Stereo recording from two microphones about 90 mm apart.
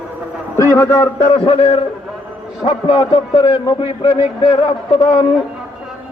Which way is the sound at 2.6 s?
60° left (ahead or behind).